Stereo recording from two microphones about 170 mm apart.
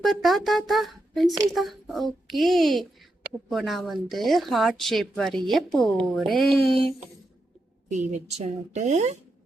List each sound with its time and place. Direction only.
0.0 s a child's voice: centre (ahead or behind)
7.9 s a woman's voice: 40° right (ahead or behind)